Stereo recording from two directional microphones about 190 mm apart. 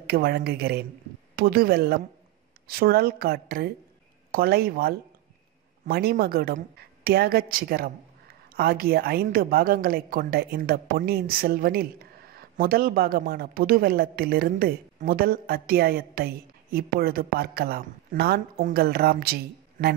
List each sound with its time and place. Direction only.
0.0 s a woman's voice: 55° right (ahead or behind)